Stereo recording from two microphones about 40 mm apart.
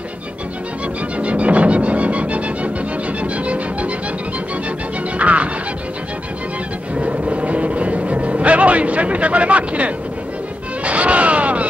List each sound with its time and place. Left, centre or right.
1.2 s music: right
5.2 s music: right
7.0 s vehicle: right
10.8 s a sound: right